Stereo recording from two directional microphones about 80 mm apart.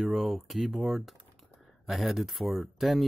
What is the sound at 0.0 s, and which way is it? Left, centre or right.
Speech, centre.